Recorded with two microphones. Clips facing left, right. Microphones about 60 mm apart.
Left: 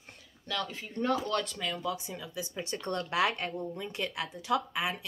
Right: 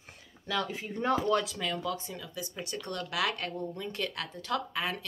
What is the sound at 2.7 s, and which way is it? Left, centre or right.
Speech, left.